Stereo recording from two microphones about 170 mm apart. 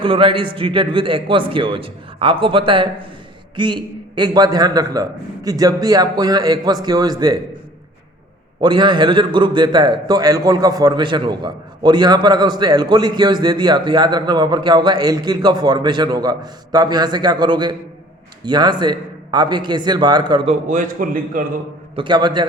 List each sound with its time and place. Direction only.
0.0 s a man's voice: 30° right (ahead or behind)
8.6 s a man's voice: 25° right (ahead or behind)
20.5 s a man's voice: 50° right (ahead or behind)
21.9 s a man's voice: 25° right (ahead or behind)